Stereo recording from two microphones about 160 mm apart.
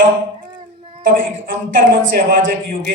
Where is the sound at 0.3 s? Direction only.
30° right (ahead or behind).